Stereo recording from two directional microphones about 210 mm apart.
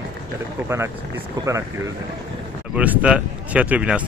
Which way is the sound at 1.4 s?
20° right (ahead or behind).